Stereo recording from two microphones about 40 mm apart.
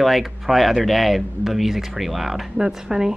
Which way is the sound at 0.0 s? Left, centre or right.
Centre.